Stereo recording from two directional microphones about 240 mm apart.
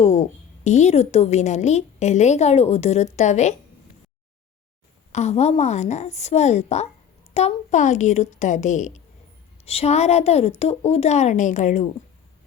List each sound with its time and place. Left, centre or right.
0.0 s a woman's voice: left
5.1 s a woman's voice: left